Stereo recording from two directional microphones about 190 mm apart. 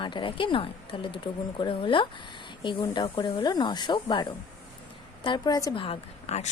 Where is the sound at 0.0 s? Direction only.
25° left (ahead or behind).